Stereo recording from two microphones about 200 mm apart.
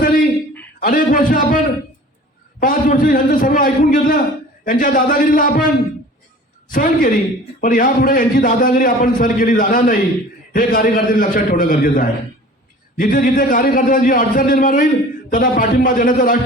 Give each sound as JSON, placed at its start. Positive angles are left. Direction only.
{"t": 0.0, "sound": "a sound", "side_deg": 45}
{"t": 0.8, "sound": "a man's voice", "side_deg": 45}
{"t": 2.6, "sound": "a man's voice", "side_deg": 45}
{"t": 6.7, "sound": "a man's voice", "side_deg": 45}